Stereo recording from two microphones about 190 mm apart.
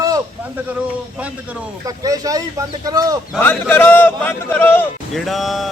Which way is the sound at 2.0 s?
20° right (ahead or behind).